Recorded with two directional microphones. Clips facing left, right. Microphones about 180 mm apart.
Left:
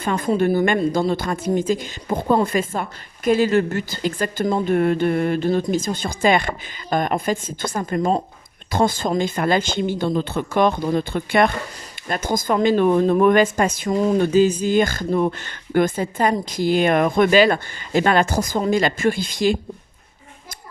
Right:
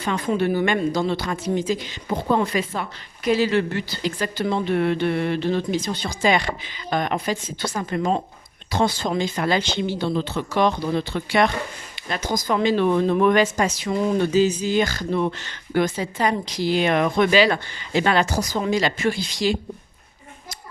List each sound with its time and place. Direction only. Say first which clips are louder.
0.0 s speech: left 3 dB; 45° left (ahead or behind)